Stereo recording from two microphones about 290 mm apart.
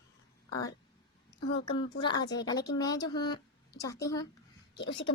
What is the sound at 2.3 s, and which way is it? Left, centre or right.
Speech, centre.